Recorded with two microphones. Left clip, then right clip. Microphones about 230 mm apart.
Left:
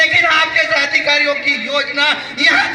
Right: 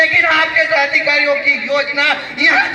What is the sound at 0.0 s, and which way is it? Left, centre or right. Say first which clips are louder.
A man's voice: even; left.